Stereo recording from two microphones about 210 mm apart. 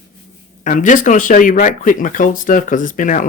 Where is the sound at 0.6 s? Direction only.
35° left (ahead or behind).